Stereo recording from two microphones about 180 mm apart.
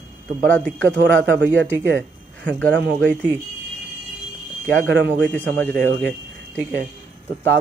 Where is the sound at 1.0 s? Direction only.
80° right.